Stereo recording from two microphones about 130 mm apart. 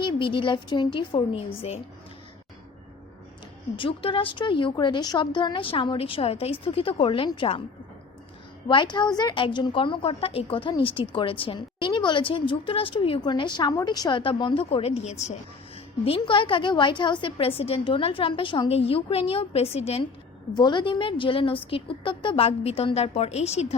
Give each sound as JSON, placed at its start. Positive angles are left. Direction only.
{"t": 0.0, "sound": "a woman's voice", "side_deg": 40}
{"t": 3.8, "sound": "a woman's voice", "side_deg": 40}
{"t": 8.6, "sound": "a woman's voice", "side_deg": 35}
{"t": 16.0, "sound": "a woman's voice", "side_deg": 45}
{"t": 20.6, "sound": "a woman's voice", "side_deg": 35}